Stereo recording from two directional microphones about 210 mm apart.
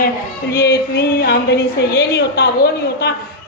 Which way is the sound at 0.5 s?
50° left (ahead or behind).